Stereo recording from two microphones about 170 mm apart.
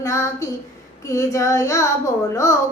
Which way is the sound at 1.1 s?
20° left (ahead or behind).